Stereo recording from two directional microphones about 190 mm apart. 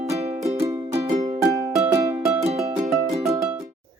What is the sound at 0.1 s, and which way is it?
Music, 35° right (ahead or behind).